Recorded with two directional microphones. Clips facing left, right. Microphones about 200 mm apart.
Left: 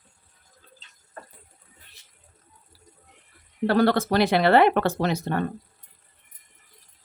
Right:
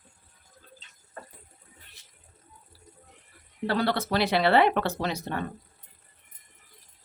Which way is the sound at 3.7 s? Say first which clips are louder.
Left 6 dB; 50° left (ahead or behind).